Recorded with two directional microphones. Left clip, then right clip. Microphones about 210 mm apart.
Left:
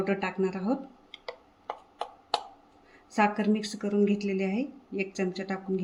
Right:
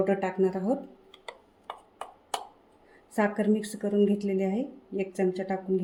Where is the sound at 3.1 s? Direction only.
5° left (ahead or behind).